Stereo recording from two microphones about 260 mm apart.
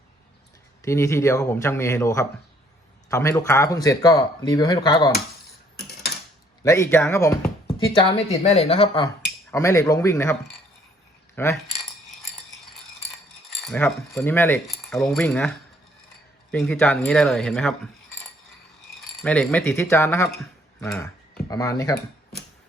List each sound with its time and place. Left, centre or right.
0.8 s speech: centre
6.6 s speech: centre
7.9 s speech: left
9.5 s speech: centre
11.3 s cutlery: centre
13.5 s speech: centre
16.5 s speech: centre
19.2 s speech: centre